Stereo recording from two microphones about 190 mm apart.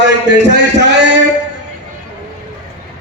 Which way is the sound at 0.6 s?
65° right (ahead or behind).